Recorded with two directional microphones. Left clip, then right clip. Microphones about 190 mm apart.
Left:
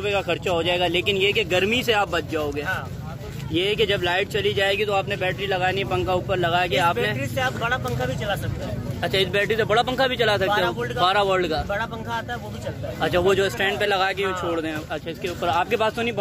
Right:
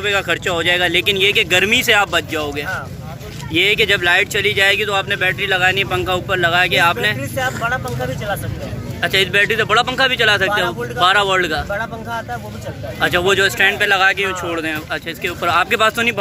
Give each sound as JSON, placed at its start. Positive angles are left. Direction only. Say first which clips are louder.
{"t": 0.0, "sound": "speech", "louder": "right 6 dB", "side_deg": 10}